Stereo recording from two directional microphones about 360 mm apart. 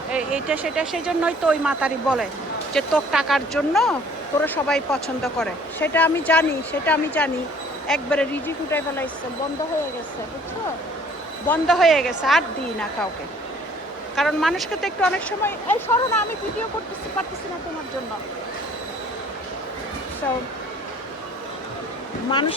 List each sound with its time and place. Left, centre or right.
0.1 s speech: centre
11.4 s speech: centre
14.2 s speech: centre
22.3 s speech: centre